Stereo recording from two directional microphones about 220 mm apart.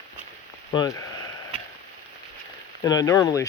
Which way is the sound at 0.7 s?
15° left (ahead or behind).